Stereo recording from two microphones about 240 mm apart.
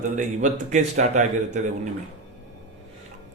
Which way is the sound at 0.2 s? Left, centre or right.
Right.